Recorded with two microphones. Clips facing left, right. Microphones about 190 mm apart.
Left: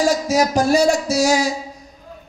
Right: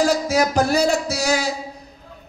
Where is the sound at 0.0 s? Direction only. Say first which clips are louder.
Left 1 dB; 60° right (ahead or behind).